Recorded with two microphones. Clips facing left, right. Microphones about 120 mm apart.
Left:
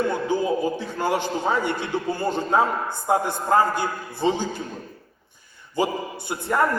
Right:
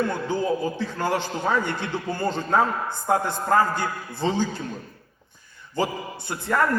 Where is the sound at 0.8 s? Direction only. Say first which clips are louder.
Left 1 dB; 15° left (ahead or behind).